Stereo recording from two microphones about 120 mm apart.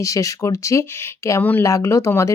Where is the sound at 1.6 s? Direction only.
25° left (ahead or behind).